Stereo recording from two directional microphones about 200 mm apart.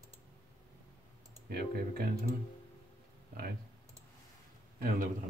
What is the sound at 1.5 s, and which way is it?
Speech, 50° right (ahead or behind).